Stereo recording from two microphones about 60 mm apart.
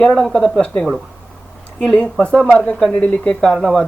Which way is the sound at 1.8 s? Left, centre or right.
Centre.